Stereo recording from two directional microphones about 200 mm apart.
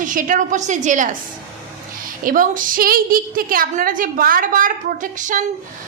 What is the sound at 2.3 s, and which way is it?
A woman's voice, 45° right (ahead or behind).